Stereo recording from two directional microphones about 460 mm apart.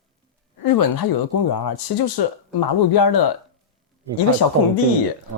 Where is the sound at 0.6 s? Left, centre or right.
Left.